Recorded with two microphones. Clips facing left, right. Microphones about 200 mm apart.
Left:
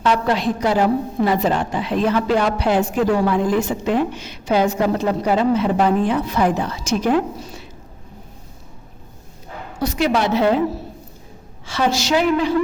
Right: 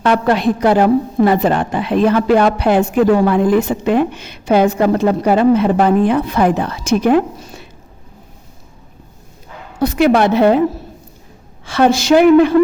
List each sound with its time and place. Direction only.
0.0 s a woman's voice: 55° right (ahead or behind)
9.8 s a woman's voice: 55° right (ahead or behind)
11.6 s a woman's voice: 55° right (ahead or behind)